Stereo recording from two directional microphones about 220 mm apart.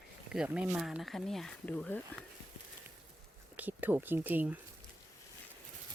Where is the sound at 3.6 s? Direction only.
10° right (ahead or behind).